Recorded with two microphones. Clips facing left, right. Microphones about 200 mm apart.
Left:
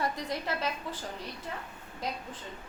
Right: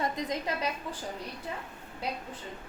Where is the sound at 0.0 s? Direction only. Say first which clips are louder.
Right 1 dB; 20° right (ahead or behind).